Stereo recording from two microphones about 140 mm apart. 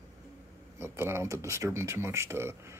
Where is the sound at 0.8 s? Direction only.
20° right (ahead or behind).